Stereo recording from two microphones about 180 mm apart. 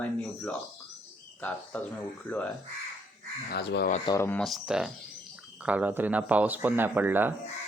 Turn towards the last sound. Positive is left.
turn(degrees=-10)  # may be behind; listen again after turning